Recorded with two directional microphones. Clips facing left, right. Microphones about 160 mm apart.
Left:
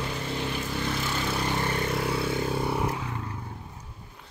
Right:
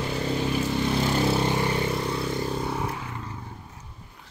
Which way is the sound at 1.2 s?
30° right (ahead or behind).